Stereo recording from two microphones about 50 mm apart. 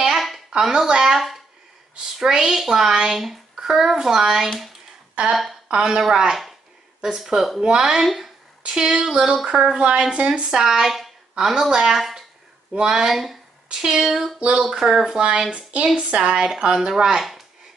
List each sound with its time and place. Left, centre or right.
0.1 s a sound: centre
0.5 s a child's voice: centre
5.7 s a child's voice: centre
7.6 s a child's voice: centre
8.0 s speech: centre
8.6 s a woman's voice: centre
10.6 s a child's voice: centre
14.4 s a child's voice: centre